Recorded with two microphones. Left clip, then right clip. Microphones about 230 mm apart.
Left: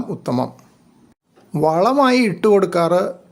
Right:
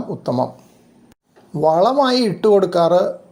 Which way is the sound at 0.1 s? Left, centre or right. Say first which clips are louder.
Right 2 dB; centre.